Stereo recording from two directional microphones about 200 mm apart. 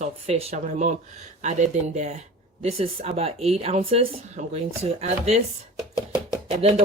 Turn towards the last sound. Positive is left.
turn(degrees=-30)  # may be behind; listen again after turning